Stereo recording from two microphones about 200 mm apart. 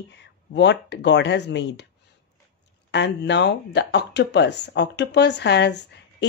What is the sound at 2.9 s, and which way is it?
Speech, 60° left (ahead or behind).